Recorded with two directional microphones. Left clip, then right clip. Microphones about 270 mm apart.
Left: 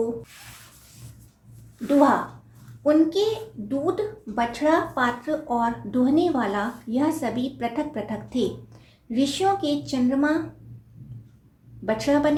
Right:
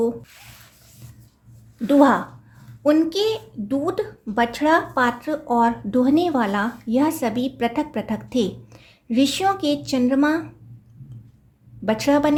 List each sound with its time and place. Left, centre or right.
1.9 s a woman's voice: right
11.9 s a woman's voice: right